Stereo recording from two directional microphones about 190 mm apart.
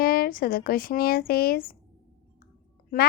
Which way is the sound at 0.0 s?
50° left (ahead or behind).